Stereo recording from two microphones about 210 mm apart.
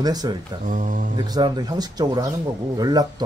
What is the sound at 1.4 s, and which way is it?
Speech, 20° right (ahead or behind).